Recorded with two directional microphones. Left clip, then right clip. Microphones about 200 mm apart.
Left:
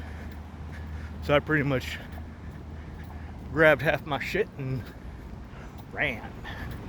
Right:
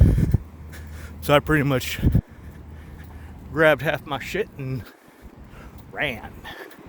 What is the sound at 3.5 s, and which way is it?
Speech, 35° right (ahead or behind).